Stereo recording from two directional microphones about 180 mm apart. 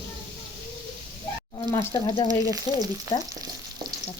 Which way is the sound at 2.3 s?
20° right (ahead or behind).